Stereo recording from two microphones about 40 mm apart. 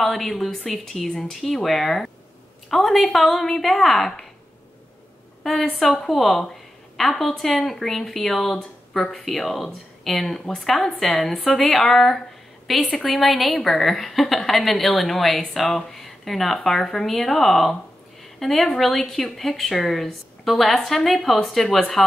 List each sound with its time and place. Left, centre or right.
0.0 s a woman's voice: centre
5.4 s a woman's voice: centre
8.9 s speech: centre
9.2 s a woman's voice: centre